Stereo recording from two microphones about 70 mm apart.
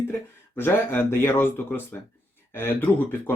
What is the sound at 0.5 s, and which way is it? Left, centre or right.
Speech, left.